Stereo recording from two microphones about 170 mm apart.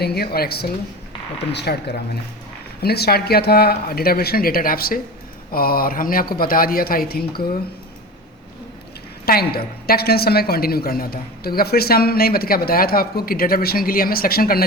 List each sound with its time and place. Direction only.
0.0 s a woman's voice: 70° left (ahead or behind)
9.2 s a woman's voice: 65° left (ahead or behind)